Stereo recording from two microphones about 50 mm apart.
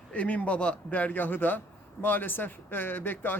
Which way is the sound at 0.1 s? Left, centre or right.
Left.